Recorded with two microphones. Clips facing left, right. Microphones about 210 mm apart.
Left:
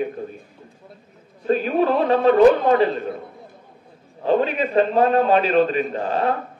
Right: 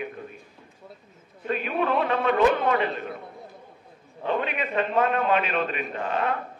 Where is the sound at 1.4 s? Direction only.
35° left (ahead or behind).